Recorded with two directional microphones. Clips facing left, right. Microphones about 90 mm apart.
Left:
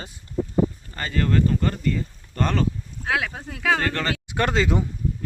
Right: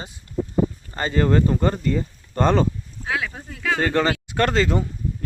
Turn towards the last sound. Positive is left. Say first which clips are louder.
# right 2 dB
turn(degrees=10)  # may be behind; listen again after turning